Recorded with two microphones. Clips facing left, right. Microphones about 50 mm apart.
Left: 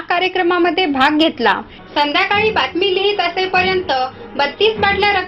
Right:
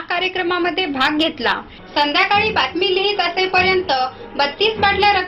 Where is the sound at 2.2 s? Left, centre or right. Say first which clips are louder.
Even; centre.